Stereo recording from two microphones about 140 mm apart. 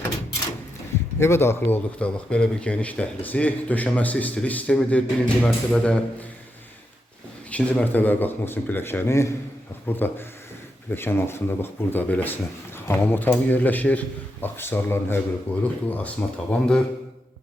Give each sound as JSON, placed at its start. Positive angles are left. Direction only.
{"t": 1.2, "sound": "speech", "side_deg": 20}
{"t": 7.5, "sound": "speech", "side_deg": 10}